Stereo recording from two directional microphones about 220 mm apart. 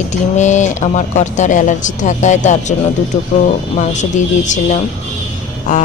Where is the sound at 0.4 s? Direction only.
35° left (ahead or behind).